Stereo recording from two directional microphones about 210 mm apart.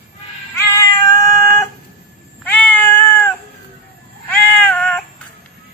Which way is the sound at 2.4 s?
10° left (ahead or behind).